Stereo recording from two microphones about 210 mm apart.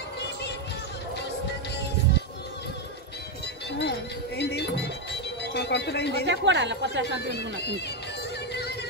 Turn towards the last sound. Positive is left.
turn(degrees=-55)  # may be behind; listen again after turning